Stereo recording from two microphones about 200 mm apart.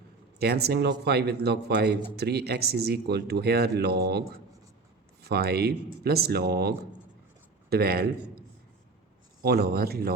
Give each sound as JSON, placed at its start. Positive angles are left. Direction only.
{"t": 0.3, "sound": "speech", "side_deg": -50}
{"t": 5.3, "sound": "speech", "side_deg": -55}
{"t": 9.4, "sound": "speech", "side_deg": -50}